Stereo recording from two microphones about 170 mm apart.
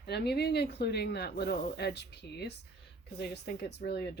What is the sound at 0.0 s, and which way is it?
Speech, 75° left (ahead or behind).